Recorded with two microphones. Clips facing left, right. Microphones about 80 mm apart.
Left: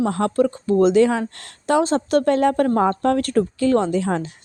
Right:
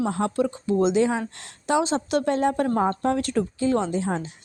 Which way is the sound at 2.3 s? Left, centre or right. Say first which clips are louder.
Left 5 dB; left.